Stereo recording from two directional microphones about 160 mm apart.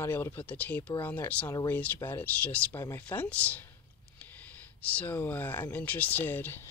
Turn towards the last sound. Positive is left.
turn(degrees=15)  # may be behind; listen again after turning